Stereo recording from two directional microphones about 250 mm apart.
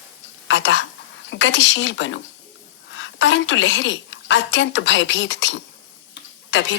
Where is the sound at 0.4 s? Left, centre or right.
Left.